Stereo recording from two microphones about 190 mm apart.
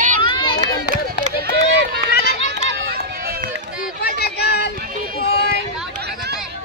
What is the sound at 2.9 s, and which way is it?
Run, 55° right (ahead or behind).